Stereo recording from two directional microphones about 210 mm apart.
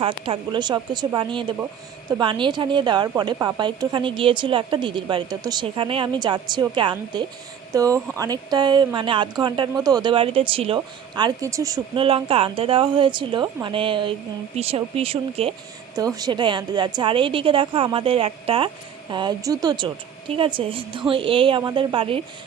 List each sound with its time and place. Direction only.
0.0 s a woman's voice: 25° right (ahead or behind)